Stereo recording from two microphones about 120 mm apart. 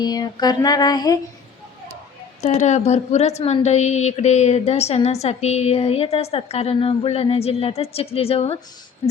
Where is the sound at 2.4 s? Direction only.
80° left.